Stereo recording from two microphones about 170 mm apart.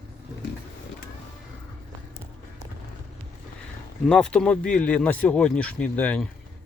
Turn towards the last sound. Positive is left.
turn(degrees=10)  # may be behind; listen again after turning